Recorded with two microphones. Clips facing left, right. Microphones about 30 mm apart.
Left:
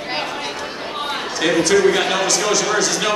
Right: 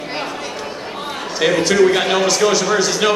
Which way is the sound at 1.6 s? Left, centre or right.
Centre.